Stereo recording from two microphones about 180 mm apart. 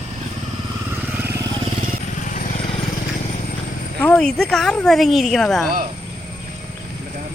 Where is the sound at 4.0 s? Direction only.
5° left (ahead or behind).